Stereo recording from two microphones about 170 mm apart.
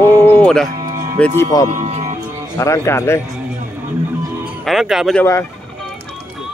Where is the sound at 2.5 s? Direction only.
15° left (ahead or behind).